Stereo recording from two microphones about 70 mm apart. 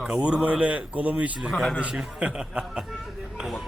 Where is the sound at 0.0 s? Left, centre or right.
Centre.